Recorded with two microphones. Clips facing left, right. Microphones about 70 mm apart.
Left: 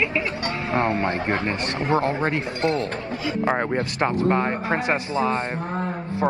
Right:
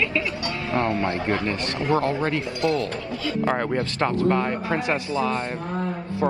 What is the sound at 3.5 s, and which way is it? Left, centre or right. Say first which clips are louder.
Speech: left 1 dB; centre.